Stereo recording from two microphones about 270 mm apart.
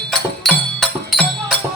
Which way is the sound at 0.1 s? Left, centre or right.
Centre.